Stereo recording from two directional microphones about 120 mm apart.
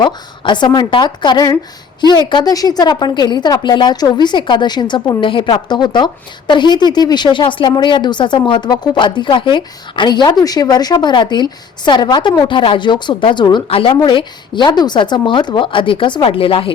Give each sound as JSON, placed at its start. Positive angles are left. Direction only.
{"t": 0.0, "sound": "a woman's voice", "side_deg": 40}